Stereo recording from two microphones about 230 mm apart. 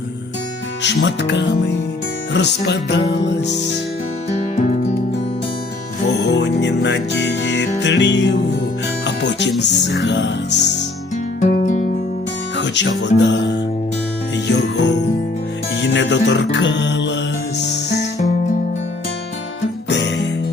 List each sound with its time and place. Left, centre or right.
0.8 s speech: left
6.3 s music: left
9.0 s speech: left
11.3 s music: left
12.5 s music: left
14.4 s speech: left
15.7 s music: left
19.9 s music: left